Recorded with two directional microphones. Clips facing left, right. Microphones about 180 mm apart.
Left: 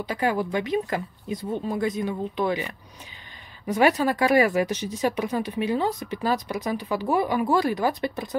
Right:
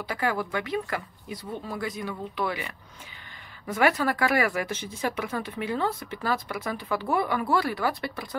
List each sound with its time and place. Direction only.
0.0 s speech: 20° left (ahead or behind)